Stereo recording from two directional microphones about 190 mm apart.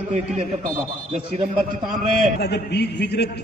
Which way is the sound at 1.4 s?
40° right (ahead or behind).